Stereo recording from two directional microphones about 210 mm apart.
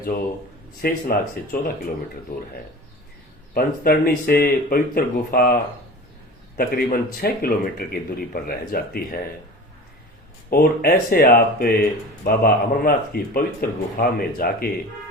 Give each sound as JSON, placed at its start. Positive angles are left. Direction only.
{"t": 0.8, "sound": "speech", "side_deg": 45}
{"t": 3.5, "sound": "speech", "side_deg": 45}
{"t": 6.6, "sound": "speech", "side_deg": 45}
{"t": 10.5, "sound": "speech", "side_deg": 45}